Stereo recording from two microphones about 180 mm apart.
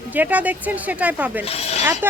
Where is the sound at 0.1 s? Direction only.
10° right (ahead or behind).